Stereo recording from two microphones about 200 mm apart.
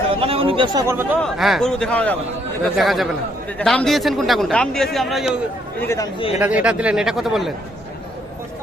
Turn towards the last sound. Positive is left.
turn(degrees=0)  # may be behind; listen again after turning